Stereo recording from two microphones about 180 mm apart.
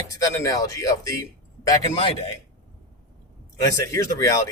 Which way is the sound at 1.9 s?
30° left (ahead or behind).